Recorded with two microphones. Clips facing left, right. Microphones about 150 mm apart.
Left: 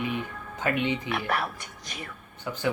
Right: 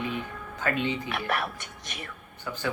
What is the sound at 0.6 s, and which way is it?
Speech, 20° left (ahead or behind).